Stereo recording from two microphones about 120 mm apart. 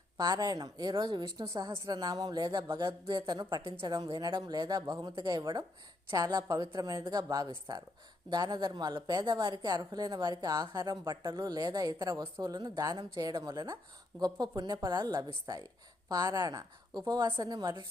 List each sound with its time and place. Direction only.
0.2 s speech: 35° right (ahead or behind)